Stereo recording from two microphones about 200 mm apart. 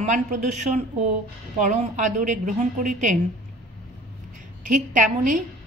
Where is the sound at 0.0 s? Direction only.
35° right (ahead or behind).